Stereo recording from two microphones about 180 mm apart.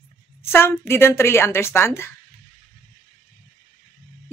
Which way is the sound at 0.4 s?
15° left (ahead or behind).